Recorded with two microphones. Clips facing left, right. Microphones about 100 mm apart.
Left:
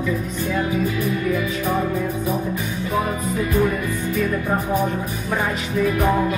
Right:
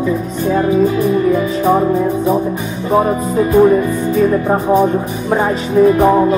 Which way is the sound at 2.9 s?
35° right (ahead or behind).